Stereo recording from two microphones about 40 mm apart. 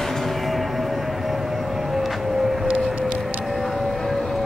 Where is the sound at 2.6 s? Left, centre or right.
Right.